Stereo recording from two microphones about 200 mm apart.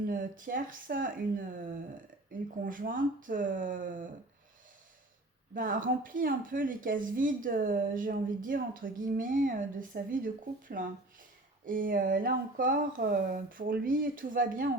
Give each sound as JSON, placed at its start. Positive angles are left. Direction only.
{"t": 0.0, "sound": "speech", "side_deg": -45}
{"t": 2.6, "sound": "speech", "side_deg": -40}
{"t": 5.5, "sound": "speech", "side_deg": -45}